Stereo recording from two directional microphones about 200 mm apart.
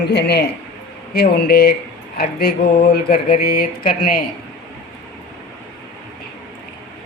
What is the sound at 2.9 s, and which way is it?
Speech, 50° left (ahead or behind).